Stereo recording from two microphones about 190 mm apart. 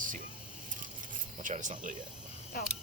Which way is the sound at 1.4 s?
40° right (ahead or behind).